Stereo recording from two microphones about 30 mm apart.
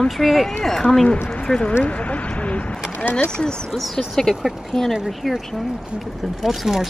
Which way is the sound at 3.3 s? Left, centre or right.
Left.